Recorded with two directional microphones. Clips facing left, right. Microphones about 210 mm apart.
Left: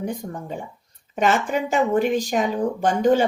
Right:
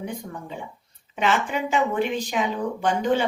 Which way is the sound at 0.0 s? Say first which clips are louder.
Left 4 dB; 45° left (ahead or behind).